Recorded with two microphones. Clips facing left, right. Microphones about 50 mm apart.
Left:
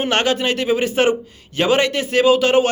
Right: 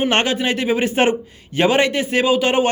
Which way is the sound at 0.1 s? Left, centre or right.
Right.